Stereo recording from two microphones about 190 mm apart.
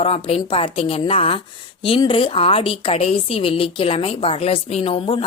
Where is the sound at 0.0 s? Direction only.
30° left (ahead or behind).